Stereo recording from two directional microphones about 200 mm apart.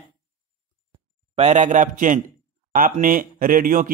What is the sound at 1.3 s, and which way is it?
A man's voice, 35° right (ahead or behind).